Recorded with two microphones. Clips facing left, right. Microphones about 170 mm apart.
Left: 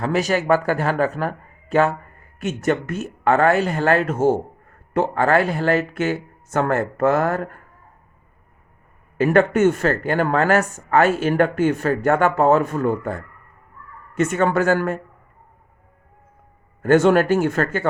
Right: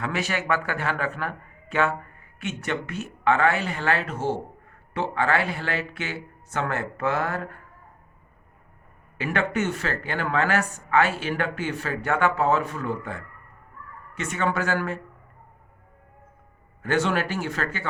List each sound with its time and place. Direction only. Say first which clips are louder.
0.0 s a man's voice: left 8 dB; 40° left (ahead or behind)
9.1 s speech: left 10 dB; 45° left (ahead or behind)
16.8 s speech: left 10 dB; 50° left (ahead or behind)